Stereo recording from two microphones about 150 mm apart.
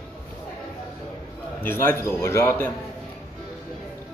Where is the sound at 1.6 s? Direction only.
15° left (ahead or behind).